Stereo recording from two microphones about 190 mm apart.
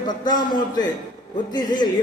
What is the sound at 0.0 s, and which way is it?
A man's voice, 25° left (ahead or behind).